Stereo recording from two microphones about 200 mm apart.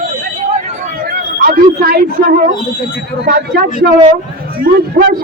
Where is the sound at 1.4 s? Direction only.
45° right (ahead or behind).